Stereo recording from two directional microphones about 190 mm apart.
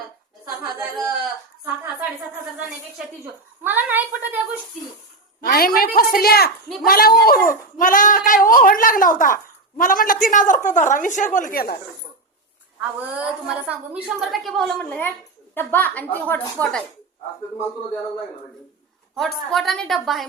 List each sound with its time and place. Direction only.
0.4 s a woman's voice: 15° right (ahead or behind)
3.6 s a woman's voice: 10° right (ahead or behind)
5.4 s a woman's voice: 50° left (ahead or behind)
13.1 s a woman's voice: 5° right (ahead or behind); by 16.8 s 10° left (ahead or behind)
19.1 s a woman's voice: centre (ahead or behind)